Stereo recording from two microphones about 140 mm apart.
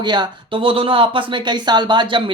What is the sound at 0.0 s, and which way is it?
A man's voice, 30° right (ahead or behind).